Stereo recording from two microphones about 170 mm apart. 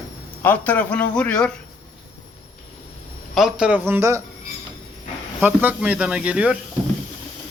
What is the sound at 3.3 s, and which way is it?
Speech, 5° right (ahead or behind).